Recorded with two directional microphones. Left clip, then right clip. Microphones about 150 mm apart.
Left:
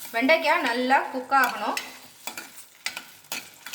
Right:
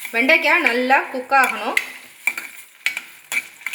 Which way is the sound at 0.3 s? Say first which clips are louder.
Right 5 dB; 65° right (ahead or behind).